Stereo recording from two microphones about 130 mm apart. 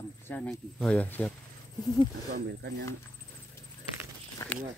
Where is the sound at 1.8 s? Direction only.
30° left (ahead or behind).